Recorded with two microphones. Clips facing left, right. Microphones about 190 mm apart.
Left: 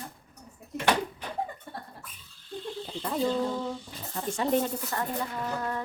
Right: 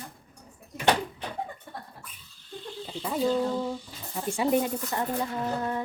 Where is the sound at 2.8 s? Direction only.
5° right (ahead or behind).